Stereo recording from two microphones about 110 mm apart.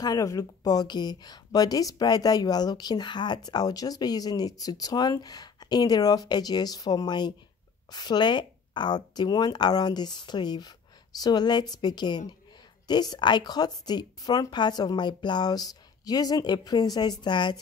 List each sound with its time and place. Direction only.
0.0 s speech: 35° left (ahead or behind)